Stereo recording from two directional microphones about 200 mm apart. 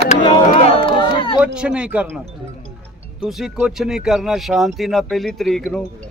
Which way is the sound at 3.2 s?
Centre (ahead or behind).